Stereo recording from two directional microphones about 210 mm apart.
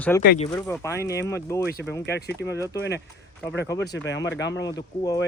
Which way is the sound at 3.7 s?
55° left (ahead or behind).